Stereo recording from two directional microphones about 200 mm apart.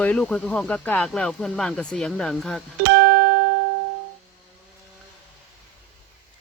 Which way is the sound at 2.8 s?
60° right (ahead or behind).